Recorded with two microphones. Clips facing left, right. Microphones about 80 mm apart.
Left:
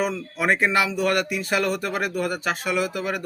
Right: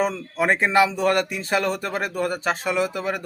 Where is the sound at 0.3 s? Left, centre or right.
Right.